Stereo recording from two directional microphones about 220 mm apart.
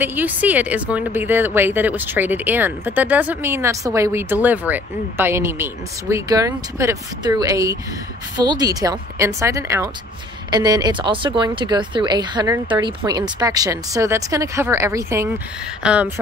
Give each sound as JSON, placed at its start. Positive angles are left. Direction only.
{"t": 0.0, "sound": "speech", "side_deg": -10}